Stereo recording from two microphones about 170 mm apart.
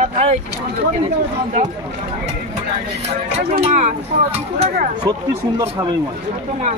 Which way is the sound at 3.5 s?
45° right (ahead or behind).